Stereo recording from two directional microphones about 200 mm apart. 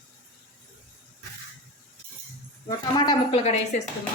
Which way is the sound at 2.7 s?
20° left (ahead or behind).